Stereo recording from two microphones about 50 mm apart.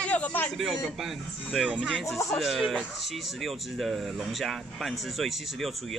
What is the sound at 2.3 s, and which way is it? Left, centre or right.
Speech, centre.